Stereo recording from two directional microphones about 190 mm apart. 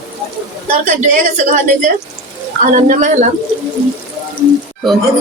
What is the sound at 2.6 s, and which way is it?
Speech, 40° right (ahead or behind).